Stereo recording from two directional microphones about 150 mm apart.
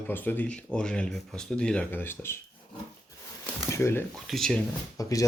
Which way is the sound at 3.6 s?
20° left (ahead or behind).